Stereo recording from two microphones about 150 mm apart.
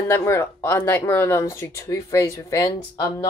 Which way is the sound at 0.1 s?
15° left (ahead or behind).